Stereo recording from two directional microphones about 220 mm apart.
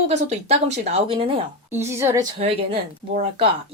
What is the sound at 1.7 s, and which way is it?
Speech, 10° right (ahead or behind).